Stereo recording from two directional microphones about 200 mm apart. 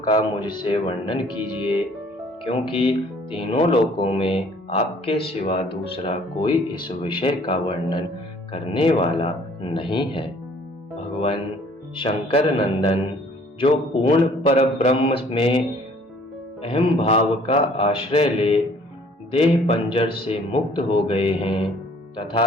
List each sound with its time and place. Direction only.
0.0 s speech: 20° left (ahead or behind)
2.4 s speech: 25° left (ahead or behind)
11.9 s speech: 25° left (ahead or behind)
16.6 s speech: 25° left (ahead or behind)